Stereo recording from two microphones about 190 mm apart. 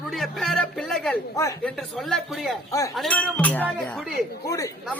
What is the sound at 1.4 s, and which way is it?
Speech, 15° left (ahead or behind).